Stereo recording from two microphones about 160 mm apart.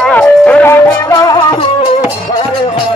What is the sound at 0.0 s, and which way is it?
Music, 5° left (ahead or behind).